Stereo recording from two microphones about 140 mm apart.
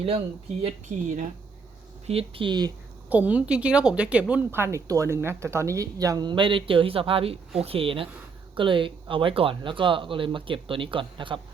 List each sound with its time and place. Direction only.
0.6 s speech: 60° right (ahead or behind)
2.0 s speech: 40° right (ahead or behind)
3.1 s a woman's voice: 10° right (ahead or behind); by 11.3 s 35° right (ahead or behind)